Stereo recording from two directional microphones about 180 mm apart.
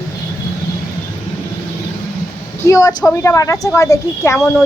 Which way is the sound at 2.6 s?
20° left (ahead or behind).